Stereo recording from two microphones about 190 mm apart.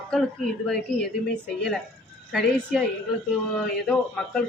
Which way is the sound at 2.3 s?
Centre (ahead or behind).